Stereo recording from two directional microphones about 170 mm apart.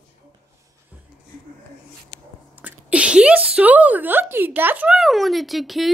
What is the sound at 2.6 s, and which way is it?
Speech, 5° right (ahead or behind).